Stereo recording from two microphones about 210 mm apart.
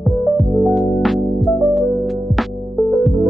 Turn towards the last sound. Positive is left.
turn(degrees=0)  # may be behind; listen again after turning